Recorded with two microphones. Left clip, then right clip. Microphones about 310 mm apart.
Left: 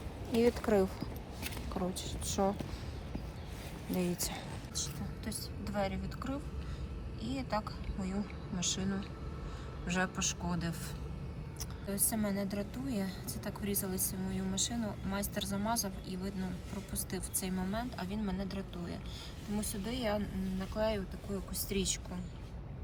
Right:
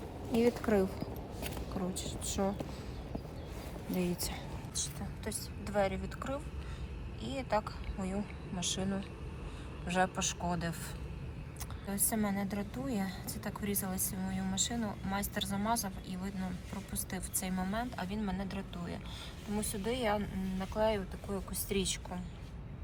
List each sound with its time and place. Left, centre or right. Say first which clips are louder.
0.3 s a woman's voice: left 1 dB; centre
3.9 s speech: even; centre
5.2 s a woman's voice: right 2 dB; centre
11.9 s a woman's voice: right 1 dB; centre